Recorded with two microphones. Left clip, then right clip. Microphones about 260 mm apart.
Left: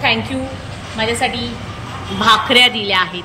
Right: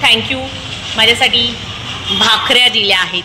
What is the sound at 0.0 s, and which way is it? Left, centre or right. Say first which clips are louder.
A woman's voice: right 5 dB; centre.